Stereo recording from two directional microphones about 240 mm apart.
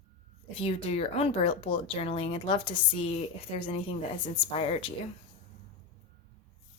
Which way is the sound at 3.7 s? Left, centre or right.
Left.